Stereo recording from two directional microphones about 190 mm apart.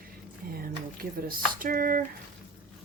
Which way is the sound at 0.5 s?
50° right (ahead or behind).